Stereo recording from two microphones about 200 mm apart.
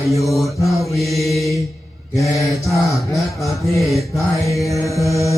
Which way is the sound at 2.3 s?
15° left (ahead or behind).